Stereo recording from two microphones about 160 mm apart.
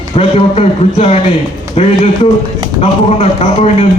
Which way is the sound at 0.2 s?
40° left (ahead or behind).